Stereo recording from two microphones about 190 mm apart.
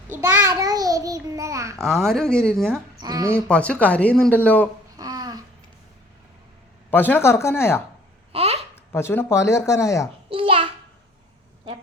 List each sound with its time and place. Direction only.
0.1 s a child's voice: 10° right (ahead or behind)
1.8 s speech: centre (ahead or behind)
3.0 s speech: 20° right (ahead or behind)
3.3 s speech: 5° left (ahead or behind)
4.9 s babbling: 20° right (ahead or behind)
6.9 s speech: 10° left (ahead or behind)
8.3 s babbling: 30° right (ahead or behind)
8.7 s speech: 10° left (ahead or behind)
10.2 s a sound: 25° right (ahead or behind)